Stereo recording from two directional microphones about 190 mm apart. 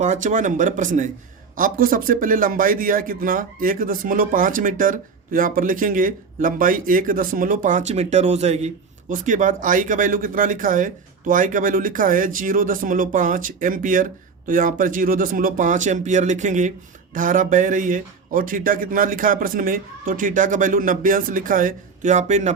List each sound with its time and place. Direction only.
0.0 s a man's voice: 40° right (ahead or behind)